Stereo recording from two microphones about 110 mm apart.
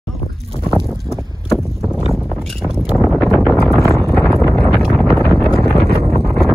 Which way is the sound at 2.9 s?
Centre (ahead or behind).